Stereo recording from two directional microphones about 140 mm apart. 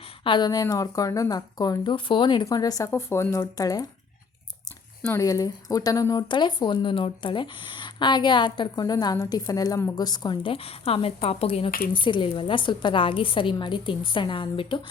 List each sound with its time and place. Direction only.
0.3 s speech: 30° left (ahead or behind)
5.0 s speech: 20° left (ahead or behind); by 14.8 s 40° left (ahead or behind)